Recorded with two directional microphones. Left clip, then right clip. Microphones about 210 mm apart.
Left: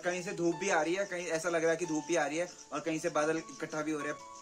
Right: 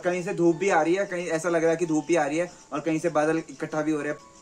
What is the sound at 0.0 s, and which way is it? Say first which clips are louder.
Speech: right 9 dB; centre (ahead or behind).